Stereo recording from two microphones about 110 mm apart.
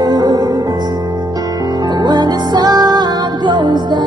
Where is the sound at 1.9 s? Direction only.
40° right (ahead or behind).